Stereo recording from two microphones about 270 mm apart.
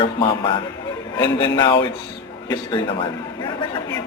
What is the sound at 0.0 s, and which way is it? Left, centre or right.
A man's voice, centre.